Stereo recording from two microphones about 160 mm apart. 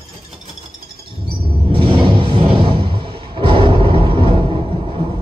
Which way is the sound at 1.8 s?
35° right (ahead or behind).